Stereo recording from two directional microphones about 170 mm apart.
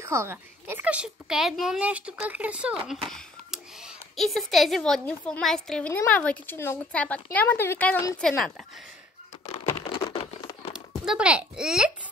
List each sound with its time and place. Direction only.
0.0 s a child's voice: 15° right (ahead or behind); by 8.2 s 15° left (ahead or behind)
8.2 s speech: 5° left (ahead or behind)
9.7 s crumpling: 20° left (ahead or behind)
10.7 s speech: 5° right (ahead or behind)